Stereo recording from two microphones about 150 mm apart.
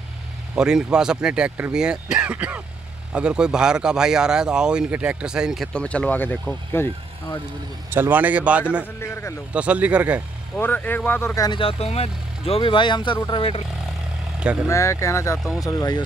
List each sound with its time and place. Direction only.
0.6 s speech: 5° right (ahead or behind); by 7.3 s 15° left (ahead or behind)
7.9 s a man's voice: 15° right (ahead or behind)
9.0 s speech: 15° left (ahead or behind)
9.5 s a man's voice: 10° right (ahead or behind)
10.5 s speech: 10° left (ahead or behind)
11.4 s speech: 35° left (ahead or behind)
14.4 s speech: 10° right (ahead or behind)
14.7 s speech: 20° left (ahead or behind)